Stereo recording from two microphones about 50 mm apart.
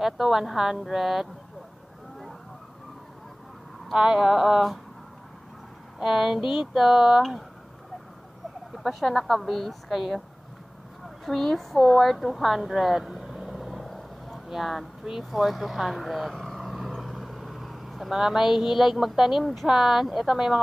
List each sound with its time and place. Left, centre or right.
0.0 s a woman's voice: centre
3.9 s speech: centre
5.9 s speech: centre
8.7 s a woman's voice: centre
11.2 s a woman's voice: centre
16.9 s vehicle: centre
19.4 s a woman's voice: centre